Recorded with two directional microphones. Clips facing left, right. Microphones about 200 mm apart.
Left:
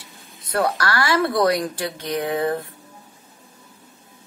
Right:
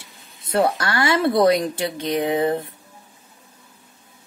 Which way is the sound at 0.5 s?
25° right (ahead or behind).